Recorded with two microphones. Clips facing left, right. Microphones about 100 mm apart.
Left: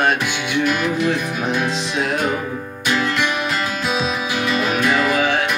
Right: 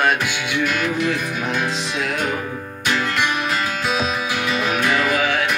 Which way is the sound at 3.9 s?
20° left (ahead or behind).